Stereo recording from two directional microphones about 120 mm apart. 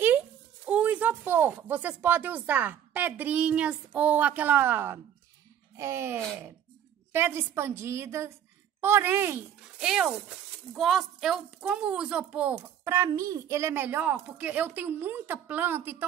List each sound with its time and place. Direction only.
0.7 s a woman's voice: 10° right (ahead or behind)
9.8 s speech: 5° right (ahead or behind)